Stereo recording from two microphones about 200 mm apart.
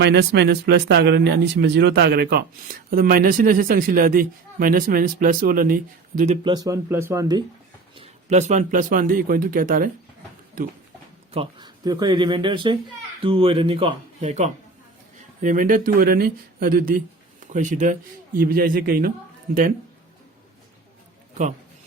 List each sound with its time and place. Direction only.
0.0 s speech: 60° right (ahead or behind); by 6.5 s 35° right (ahead or behind)
6.5 s speech: 15° right (ahead or behind)
7.9 s speech: 35° right (ahead or behind)
11.3 s speech: 25° right (ahead or behind); by 19.1 s 50° right (ahead or behind)